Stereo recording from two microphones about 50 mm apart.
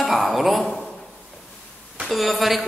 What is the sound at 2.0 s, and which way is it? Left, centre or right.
Speech, centre.